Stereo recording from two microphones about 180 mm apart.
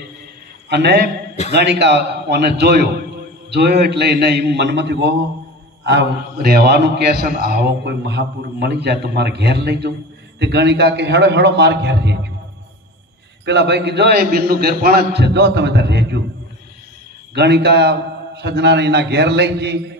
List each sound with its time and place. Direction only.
0.7 s a man's voice: 65° right (ahead or behind)
13.5 s a man's voice: 70° right (ahead or behind)
17.3 s a man's voice: 70° right (ahead or behind)